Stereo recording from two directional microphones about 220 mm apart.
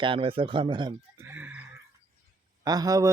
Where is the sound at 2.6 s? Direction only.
15° right (ahead or behind).